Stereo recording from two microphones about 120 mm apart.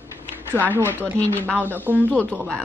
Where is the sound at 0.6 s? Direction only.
15° left (ahead or behind).